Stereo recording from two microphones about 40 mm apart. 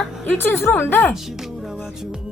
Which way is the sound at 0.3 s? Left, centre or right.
Left.